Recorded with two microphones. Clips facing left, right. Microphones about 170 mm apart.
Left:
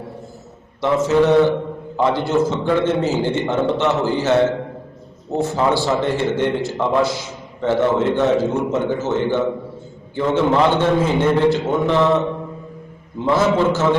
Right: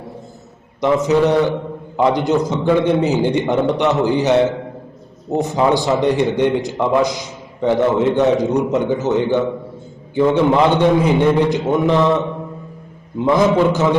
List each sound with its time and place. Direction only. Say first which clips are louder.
0.8 s a man's voice: right 1 dB; 15° right (ahead or behind)
13.1 s a man's voice: right 3 dB; 15° right (ahead or behind)